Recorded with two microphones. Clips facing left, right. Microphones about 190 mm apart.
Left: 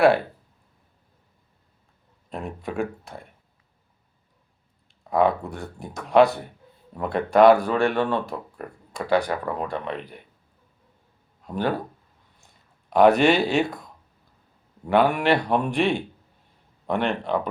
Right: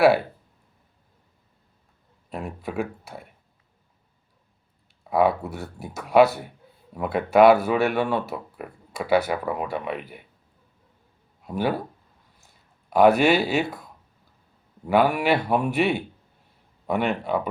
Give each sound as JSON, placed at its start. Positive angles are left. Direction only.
{"t": 2.3, "sound": "speech", "side_deg": -5}
{"t": 5.0, "sound": "speech", "side_deg": -5}
{"t": 11.4, "sound": "speech", "side_deg": -5}
{"t": 12.9, "sound": "speech", "side_deg": -5}